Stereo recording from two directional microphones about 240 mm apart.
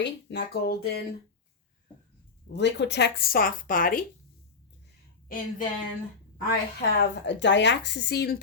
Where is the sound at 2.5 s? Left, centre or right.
Left.